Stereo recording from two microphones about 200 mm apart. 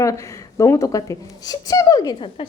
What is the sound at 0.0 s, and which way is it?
Speech, 15° left (ahead or behind).